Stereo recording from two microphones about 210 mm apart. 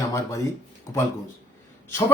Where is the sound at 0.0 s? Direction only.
15° left (ahead or behind).